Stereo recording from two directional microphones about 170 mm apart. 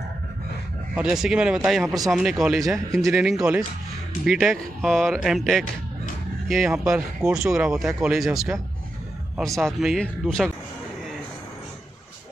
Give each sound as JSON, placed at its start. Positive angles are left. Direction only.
{"t": 0.9, "sound": "speech", "side_deg": -5}
{"t": 9.6, "sound": "speech", "side_deg": 0}